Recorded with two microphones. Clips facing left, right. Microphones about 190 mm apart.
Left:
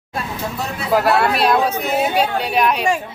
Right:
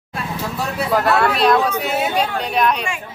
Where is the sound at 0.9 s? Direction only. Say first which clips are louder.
Left 2 dB; 5° left (ahead or behind).